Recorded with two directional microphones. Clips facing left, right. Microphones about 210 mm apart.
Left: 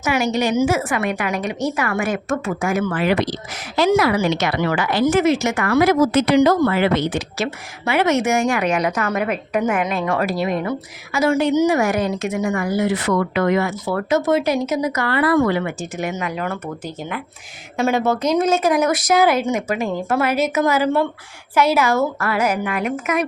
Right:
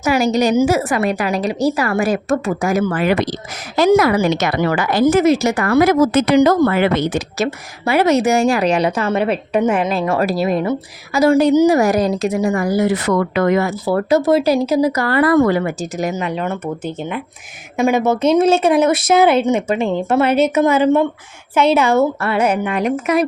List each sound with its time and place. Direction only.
0.0 s a woman's voice: 35° right (ahead or behind)